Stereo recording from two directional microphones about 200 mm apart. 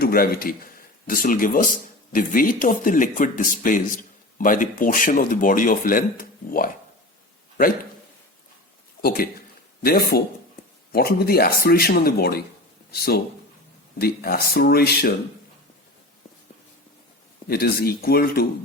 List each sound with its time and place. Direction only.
0.0 s speech: 50° left (ahead or behind)
9.0 s speech: 50° left (ahead or behind)
17.5 s speech: 50° left (ahead or behind)